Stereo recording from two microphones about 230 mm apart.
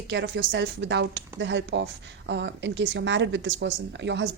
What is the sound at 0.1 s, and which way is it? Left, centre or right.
Speech, right.